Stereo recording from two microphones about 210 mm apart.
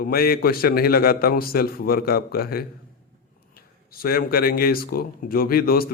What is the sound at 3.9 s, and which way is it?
A man's voice, 45° left (ahead or behind).